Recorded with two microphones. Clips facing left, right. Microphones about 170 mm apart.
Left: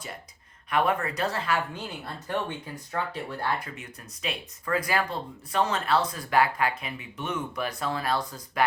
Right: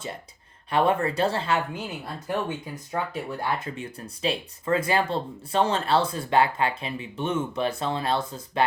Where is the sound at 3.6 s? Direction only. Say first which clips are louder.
Right 7 dB; 30° right (ahead or behind).